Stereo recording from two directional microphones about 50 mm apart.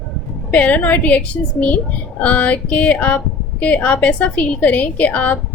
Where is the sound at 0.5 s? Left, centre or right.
Left.